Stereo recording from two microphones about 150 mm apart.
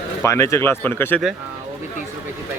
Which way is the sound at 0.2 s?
20° left (ahead or behind).